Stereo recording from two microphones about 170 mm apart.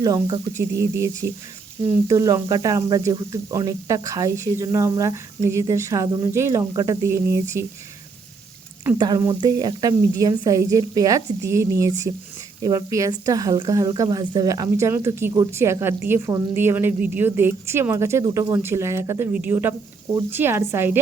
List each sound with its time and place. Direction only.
0.0 s speech: 25° right (ahead or behind)
9.0 s speech: 25° right (ahead or behind)